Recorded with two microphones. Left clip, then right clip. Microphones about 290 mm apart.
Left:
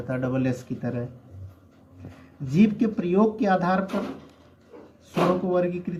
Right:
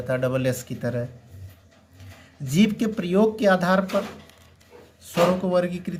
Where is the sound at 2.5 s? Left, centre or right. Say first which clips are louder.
Even; right.